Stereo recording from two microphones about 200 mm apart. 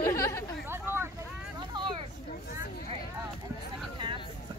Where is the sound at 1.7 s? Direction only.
25° right (ahead or behind).